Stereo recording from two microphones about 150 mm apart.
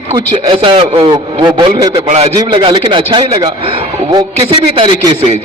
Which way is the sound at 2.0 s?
45° right (ahead or behind).